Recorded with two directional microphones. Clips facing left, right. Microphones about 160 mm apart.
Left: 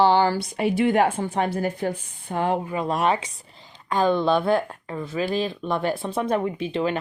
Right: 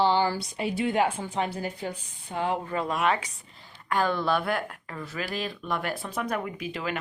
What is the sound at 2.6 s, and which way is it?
Speech, 15° left (ahead or behind).